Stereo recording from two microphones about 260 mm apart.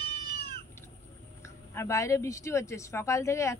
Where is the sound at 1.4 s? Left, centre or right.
Centre.